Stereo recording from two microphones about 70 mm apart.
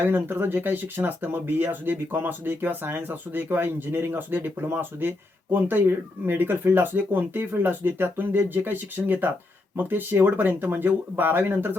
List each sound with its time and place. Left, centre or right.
0.0 s speech: right